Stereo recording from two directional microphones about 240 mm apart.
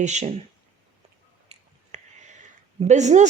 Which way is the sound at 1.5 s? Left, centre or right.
Right.